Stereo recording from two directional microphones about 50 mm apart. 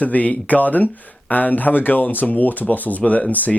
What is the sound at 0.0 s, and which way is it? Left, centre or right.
Speech, left.